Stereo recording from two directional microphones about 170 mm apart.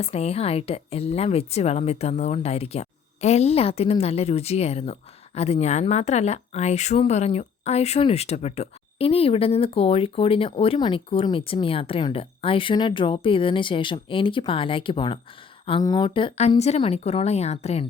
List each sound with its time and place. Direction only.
0.0 s a woman's voice: 35° left (ahead or behind)